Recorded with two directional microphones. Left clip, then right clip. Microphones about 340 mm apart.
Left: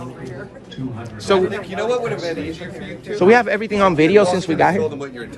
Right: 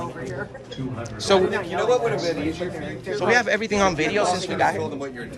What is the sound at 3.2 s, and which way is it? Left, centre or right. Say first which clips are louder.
Speech: left 6 dB; centre.